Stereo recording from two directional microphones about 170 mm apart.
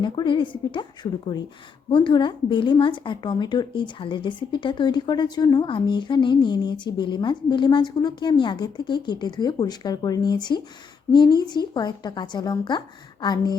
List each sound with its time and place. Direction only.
0.0 s a woman's voice: 30° left (ahead or behind)
1.9 s a woman's voice: 30° left (ahead or behind)